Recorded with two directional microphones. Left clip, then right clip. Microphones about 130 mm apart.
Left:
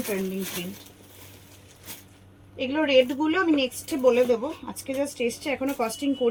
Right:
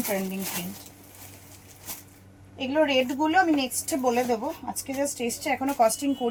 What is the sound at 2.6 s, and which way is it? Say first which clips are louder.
A woman's voice: left 2 dB; 45° right (ahead or behind).